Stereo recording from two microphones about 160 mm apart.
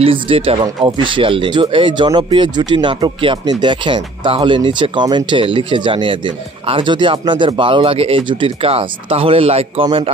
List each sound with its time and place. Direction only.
0.0 s speech: 35° right (ahead or behind)